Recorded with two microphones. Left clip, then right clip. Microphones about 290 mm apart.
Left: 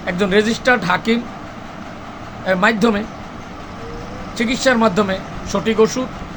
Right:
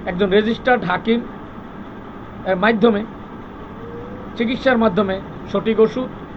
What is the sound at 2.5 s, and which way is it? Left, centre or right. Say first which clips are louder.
Speech: even; centre.